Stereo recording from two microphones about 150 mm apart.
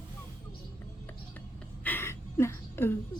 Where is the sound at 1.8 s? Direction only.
15° left (ahead or behind).